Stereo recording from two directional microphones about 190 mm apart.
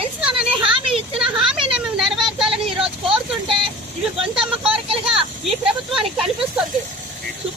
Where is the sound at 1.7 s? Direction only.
5° right (ahead or behind).